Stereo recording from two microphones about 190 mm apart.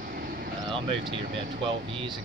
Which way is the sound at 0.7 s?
25° right (ahead or behind).